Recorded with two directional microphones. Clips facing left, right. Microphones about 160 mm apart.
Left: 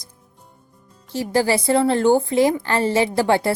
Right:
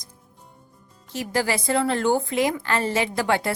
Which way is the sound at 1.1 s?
30° left (ahead or behind).